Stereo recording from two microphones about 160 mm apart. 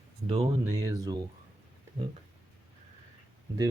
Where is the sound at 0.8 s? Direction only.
20° right (ahead or behind).